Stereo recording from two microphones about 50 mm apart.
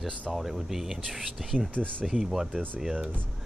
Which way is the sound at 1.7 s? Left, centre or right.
Left.